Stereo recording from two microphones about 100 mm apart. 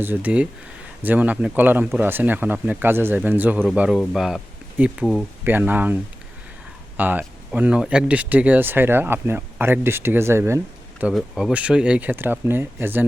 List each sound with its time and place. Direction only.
0.0 s speech: 20° right (ahead or behind)
3.8 s speech: 5° right (ahead or behind)
4.8 s speech: 15° right (ahead or behind)
11.1 s speech: centre (ahead or behind); by 13.1 s 20° right (ahead or behind)